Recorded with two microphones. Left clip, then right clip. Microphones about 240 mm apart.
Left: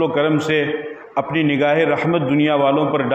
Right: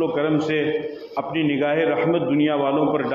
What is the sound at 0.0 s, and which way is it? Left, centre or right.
A man's voice, left.